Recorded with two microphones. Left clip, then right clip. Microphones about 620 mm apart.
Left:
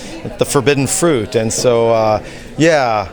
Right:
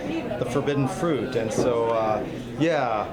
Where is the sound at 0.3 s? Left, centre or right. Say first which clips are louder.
Left 14 dB; left.